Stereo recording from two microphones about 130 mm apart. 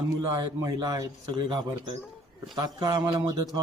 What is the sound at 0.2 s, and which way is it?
Speech, 30° right (ahead or behind).